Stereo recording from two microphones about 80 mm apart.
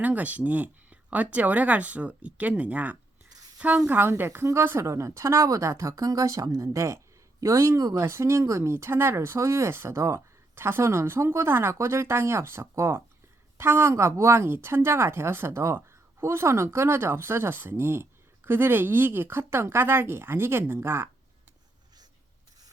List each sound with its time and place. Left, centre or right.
0.0 s a woman's voice: centre